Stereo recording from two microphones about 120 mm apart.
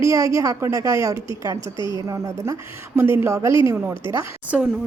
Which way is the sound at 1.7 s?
40° left (ahead or behind).